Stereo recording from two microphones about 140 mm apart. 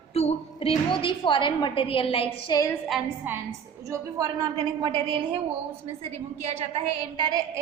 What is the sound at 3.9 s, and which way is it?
A woman's voice, 25° right (ahead or behind).